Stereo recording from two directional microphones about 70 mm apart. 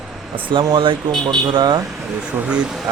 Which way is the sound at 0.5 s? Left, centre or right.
Right.